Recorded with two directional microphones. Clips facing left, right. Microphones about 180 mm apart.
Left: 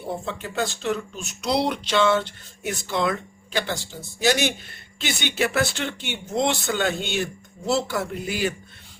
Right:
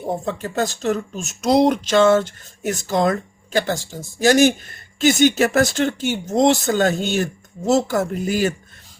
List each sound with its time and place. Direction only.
0.0 s speech: 45° right (ahead or behind)